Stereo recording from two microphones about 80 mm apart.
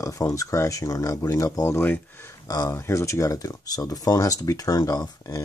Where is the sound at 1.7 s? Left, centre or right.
Left.